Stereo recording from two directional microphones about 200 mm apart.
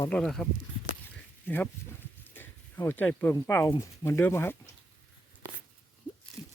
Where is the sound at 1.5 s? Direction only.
10° left (ahead or behind).